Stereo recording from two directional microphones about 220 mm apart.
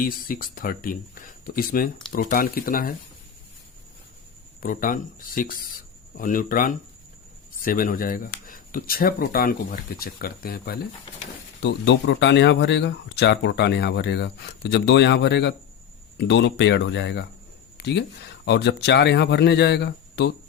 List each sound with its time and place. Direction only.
0.0 s speech: 40° left (ahead or behind)
4.6 s speech: 40° left (ahead or behind)
17.7 s a sound: 50° left (ahead or behind)
18.4 s speech: 50° left (ahead or behind)